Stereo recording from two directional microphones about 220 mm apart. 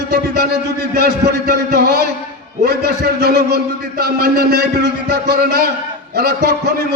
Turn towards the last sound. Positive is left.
turn(degrees=-45)  # may be behind; listen again after turning